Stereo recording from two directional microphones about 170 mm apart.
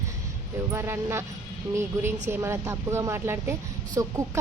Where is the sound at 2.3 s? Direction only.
15° right (ahead or behind).